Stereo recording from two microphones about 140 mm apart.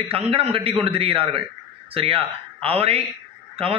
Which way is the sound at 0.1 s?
45° right (ahead or behind).